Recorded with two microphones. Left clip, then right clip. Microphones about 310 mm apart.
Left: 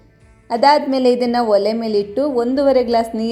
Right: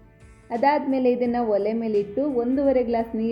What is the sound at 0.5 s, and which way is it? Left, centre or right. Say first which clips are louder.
A woman's voice: left 8 dB; centre.